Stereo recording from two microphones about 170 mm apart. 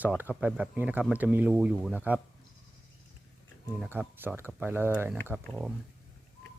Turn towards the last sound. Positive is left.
turn(degrees=-10)  # may be behind; listen again after turning